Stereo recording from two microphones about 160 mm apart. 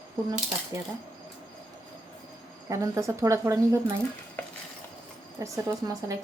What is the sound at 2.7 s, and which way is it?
A woman's voice, 20° right (ahead or behind).